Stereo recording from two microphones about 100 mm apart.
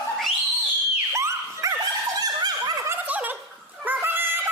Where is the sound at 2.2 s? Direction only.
45° right (ahead or behind).